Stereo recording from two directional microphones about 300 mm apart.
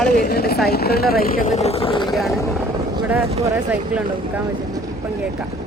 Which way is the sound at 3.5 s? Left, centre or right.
Centre.